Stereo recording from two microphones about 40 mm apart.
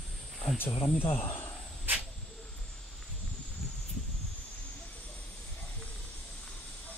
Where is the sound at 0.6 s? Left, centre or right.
Left.